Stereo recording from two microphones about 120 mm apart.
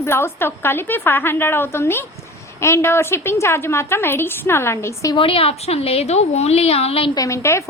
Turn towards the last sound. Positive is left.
turn(degrees=25)  # may be behind; listen again after turning